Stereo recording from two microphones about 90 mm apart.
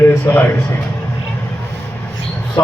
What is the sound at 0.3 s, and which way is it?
Speech, 45° left (ahead or behind).